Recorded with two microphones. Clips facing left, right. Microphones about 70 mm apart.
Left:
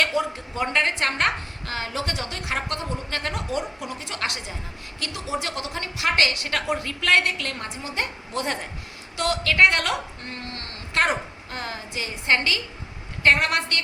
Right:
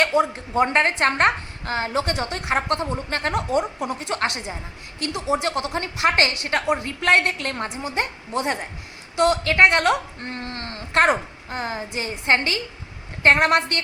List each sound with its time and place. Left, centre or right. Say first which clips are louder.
0.0 s a woman's voice: right 4 dB; right